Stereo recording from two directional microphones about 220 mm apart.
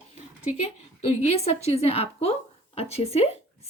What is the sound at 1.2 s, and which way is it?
A woman's voice, 30° left (ahead or behind).